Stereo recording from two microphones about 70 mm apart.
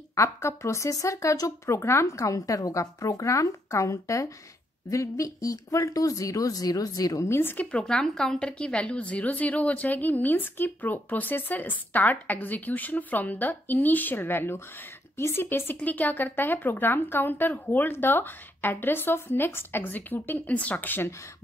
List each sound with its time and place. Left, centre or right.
0.1 s a woman's voice: left
1.8 s a woman's voice: left
7.2 s speech: left
7.8 s a woman's voice: centre; by 21.1 s left